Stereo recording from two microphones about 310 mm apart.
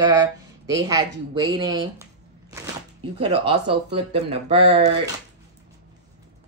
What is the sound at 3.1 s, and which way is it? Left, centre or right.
Speech, centre.